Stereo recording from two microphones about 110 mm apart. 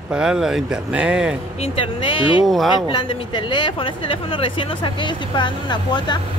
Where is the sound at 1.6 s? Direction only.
50° left (ahead or behind).